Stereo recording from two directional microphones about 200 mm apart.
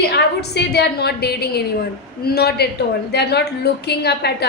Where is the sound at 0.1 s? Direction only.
55° left (ahead or behind).